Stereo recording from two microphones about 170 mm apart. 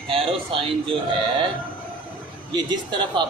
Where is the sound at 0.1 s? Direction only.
35° right (ahead or behind).